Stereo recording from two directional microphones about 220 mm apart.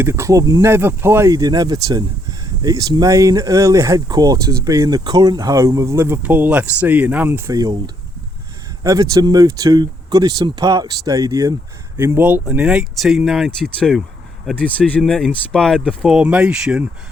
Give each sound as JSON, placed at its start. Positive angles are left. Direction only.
{"t": 0.0, "sound": "speech", "side_deg": -10}
{"t": 8.8, "sound": "speech", "side_deg": -15}